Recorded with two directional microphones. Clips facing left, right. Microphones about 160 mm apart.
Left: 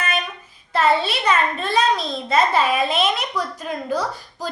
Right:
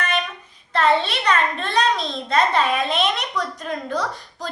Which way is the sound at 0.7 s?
5° left (ahead or behind).